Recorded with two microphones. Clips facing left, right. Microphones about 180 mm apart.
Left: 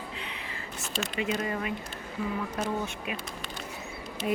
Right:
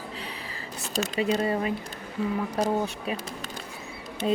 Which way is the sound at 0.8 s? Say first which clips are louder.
Right 5 dB; 40° right (ahead or behind).